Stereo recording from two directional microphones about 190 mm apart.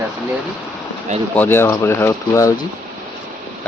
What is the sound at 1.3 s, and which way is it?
Speech, 10° left (ahead or behind).